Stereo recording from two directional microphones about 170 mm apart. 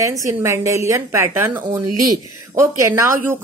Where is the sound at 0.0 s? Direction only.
20° right (ahead or behind).